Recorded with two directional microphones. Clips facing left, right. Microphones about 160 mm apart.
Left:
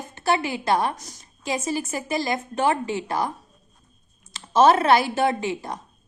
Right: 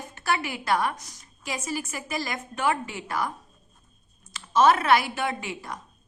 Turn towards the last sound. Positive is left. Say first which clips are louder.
# left 7 dB
turn(degrees=30)  # may be behind; listen again after turning